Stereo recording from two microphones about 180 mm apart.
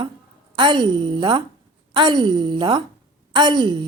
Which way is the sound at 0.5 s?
25° right (ahead or behind).